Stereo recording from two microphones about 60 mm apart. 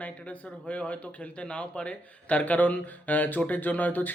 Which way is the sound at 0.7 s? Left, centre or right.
Left.